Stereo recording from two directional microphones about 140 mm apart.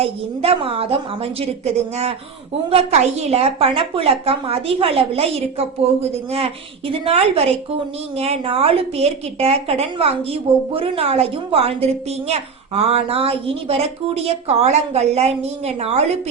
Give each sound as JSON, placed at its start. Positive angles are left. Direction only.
{"t": 0.0, "sound": "a woman's voice", "side_deg": -40}